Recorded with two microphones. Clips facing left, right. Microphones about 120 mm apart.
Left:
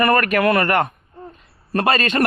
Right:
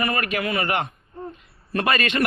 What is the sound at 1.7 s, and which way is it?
Speech, 35° left (ahead or behind).